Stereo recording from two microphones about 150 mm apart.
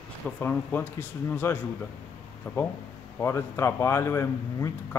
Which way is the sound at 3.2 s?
15° left (ahead or behind).